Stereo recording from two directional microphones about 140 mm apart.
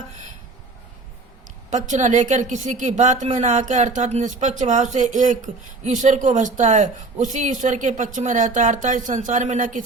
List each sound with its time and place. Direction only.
1.7 s a woman's voice: 60° right (ahead or behind)